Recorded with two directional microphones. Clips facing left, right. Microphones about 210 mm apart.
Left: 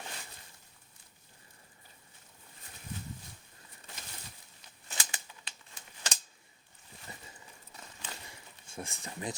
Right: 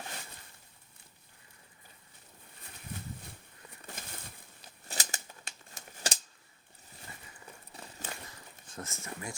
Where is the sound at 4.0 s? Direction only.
50° right (ahead or behind).